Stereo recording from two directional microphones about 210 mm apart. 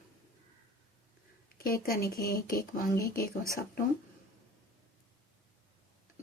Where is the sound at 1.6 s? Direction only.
45° left (ahead or behind).